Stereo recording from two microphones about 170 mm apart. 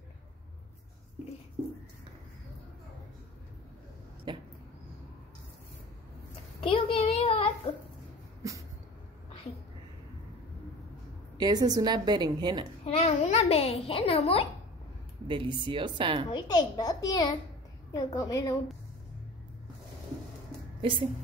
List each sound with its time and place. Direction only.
4.3 s a sound: 25° right (ahead or behind)
6.6 s a sound: 30° left (ahead or behind)
11.3 s a woman's voice: 25° right (ahead or behind)
12.8 s a child's voice: 35° left (ahead or behind)
15.2 s a woman's voice: 30° right (ahead or behind)
16.3 s a child's voice: 25° left (ahead or behind)
20.8 s speech: 30° right (ahead or behind)